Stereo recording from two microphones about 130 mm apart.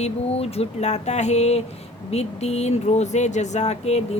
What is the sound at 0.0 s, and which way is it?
Speech, 50° left (ahead or behind).